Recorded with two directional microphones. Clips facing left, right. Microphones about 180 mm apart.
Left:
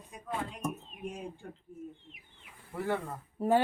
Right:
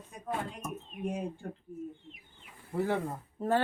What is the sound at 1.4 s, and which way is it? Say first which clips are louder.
Speech: right 5 dB; 50° right (ahead or behind).